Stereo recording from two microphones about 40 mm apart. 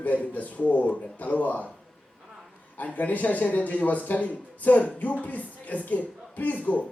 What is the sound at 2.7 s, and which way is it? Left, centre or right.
A man's voice, left.